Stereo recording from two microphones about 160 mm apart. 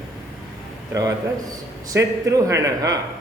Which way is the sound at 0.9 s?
20° right (ahead or behind).